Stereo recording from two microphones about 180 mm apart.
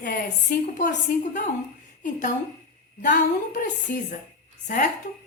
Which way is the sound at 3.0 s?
45° left (ahead or behind).